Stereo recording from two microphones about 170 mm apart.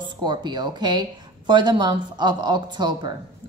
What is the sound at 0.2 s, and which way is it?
A woman's voice, 25° right (ahead or behind).